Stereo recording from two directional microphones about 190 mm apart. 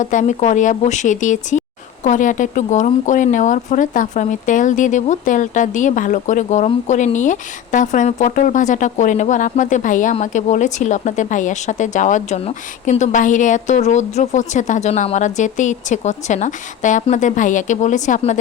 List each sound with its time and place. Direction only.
0.0 s speech: 40° left (ahead or behind)